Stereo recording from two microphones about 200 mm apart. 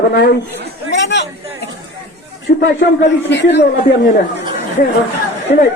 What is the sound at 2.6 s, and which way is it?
A man's voice, 60° left (ahead or behind).